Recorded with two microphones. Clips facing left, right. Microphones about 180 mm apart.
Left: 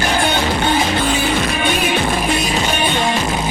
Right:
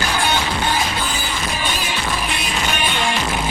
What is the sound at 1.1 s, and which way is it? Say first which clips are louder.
Music: left 8 dB; 65° left (ahead or behind).